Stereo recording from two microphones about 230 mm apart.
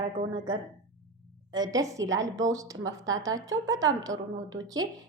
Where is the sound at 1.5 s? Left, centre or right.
Centre.